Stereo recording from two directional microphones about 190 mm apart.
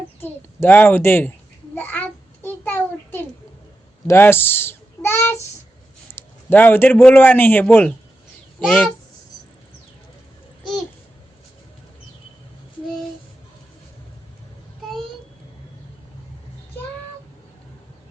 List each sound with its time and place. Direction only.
0.2 s a man's voice: 10° left (ahead or behind)
1.7 s a sound: 10° left (ahead or behind)
6.1 s a man's voice: 10° left (ahead or behind)